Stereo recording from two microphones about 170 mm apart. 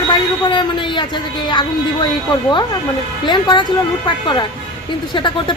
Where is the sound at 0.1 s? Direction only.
25° left (ahead or behind).